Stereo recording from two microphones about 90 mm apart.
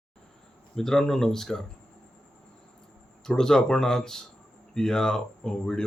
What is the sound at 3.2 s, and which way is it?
Speech, 5° left (ahead or behind).